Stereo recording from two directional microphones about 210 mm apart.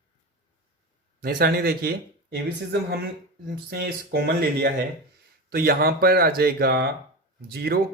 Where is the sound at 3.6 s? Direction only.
45° right (ahead or behind).